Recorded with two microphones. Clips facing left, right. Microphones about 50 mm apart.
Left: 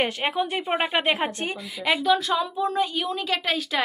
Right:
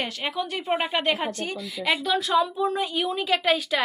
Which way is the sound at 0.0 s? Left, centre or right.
Left.